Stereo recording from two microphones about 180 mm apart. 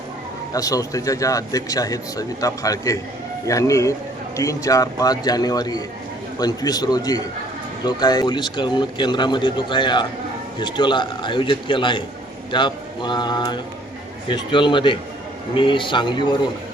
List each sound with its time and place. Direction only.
0.5 s speech: 20° left (ahead or behind)